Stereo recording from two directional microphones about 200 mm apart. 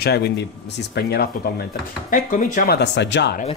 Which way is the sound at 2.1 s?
40° left (ahead or behind).